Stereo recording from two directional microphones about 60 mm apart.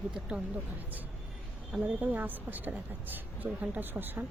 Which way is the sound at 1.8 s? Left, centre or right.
Right.